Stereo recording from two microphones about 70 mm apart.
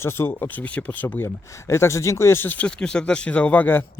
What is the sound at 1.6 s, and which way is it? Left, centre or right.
Speech, left.